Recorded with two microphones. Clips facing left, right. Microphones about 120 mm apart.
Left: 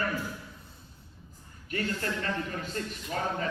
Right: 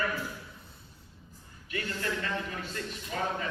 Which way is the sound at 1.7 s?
45° left (ahead or behind).